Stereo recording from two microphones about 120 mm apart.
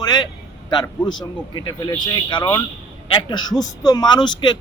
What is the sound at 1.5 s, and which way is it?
A man's voice, 40° left (ahead or behind).